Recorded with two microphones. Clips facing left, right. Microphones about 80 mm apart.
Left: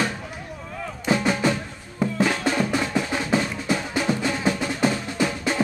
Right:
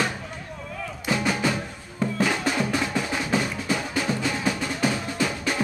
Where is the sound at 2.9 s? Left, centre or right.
Centre.